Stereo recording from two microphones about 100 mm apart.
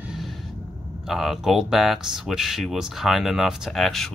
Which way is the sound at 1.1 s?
5° right (ahead or behind).